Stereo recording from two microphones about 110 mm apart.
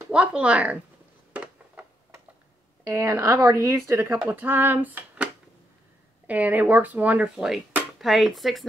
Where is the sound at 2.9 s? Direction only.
25° right (ahead or behind).